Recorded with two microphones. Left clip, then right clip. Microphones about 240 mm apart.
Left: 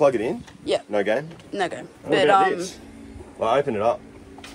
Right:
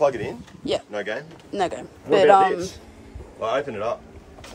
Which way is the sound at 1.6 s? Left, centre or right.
Centre.